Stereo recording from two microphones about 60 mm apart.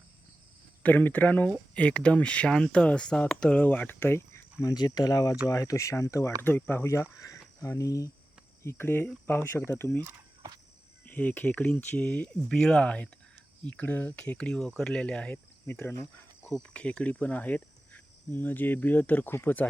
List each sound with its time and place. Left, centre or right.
0.8 s speech: left
4.6 s speech: left
5.5 s speech: left
6.4 s speech: left
6.8 s speech: left
7.3 s speech: left
8.6 s speech: left
11.0 s speech: left
16.6 s speech: centre; by 19.6 s left